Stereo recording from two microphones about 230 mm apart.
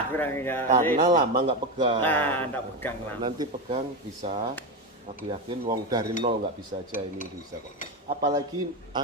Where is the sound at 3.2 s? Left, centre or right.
Right.